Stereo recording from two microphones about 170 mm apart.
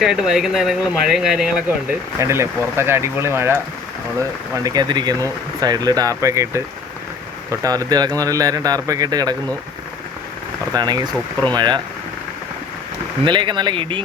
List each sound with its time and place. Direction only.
0.0 s speech: centre (ahead or behind); by 9.3 s 20° right (ahead or behind)
10.7 s speech: 25° right (ahead or behind)
13.2 s speech: 25° right (ahead or behind)